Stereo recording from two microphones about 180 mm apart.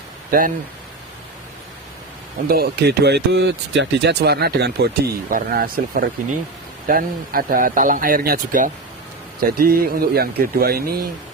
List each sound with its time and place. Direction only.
0.3 s speech: 50° right (ahead or behind)
2.5 s speech: 60° right (ahead or behind)